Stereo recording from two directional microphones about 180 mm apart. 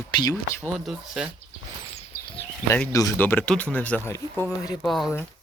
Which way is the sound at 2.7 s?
15° left (ahead or behind).